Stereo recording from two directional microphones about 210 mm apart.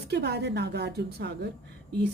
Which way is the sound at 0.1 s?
50° right (ahead or behind).